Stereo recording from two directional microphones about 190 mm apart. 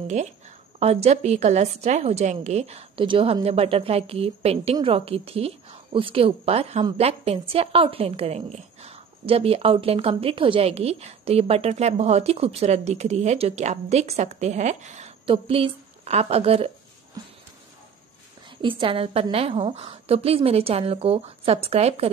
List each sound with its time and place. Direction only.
0.7 s a woman's voice: 35° right (ahead or behind)
18.6 s a woman's voice: 25° right (ahead or behind)